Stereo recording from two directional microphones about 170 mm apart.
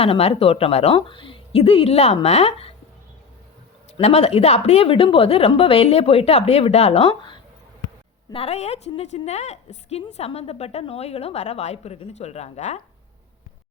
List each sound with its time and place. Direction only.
0.0 s a woman's voice: 35° left (ahead or behind)
3.9 s a woman's voice: 35° left (ahead or behind)